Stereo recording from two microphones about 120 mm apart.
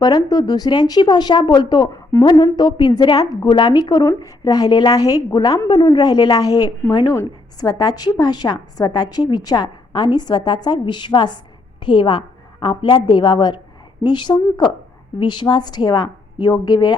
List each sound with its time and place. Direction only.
0.0 s a woman's voice: 35° left (ahead or behind)
2.6 s a woman's voice: 40° left (ahead or behind)
4.0 s speech: 20° left (ahead or behind)
4.4 s a woman's voice: 35° left (ahead or behind)